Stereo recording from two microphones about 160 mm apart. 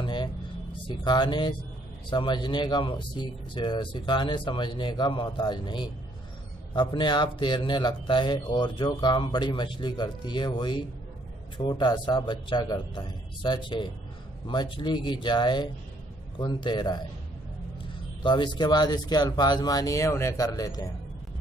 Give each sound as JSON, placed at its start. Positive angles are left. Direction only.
{"t": 0.0, "sound": "a sound", "side_deg": 30}
{"t": 0.8, "sound": "a man's voice", "side_deg": 30}
{"t": 18.2, "sound": "a man's voice", "side_deg": 30}